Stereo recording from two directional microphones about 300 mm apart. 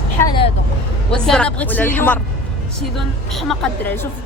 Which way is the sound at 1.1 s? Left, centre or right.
Centre.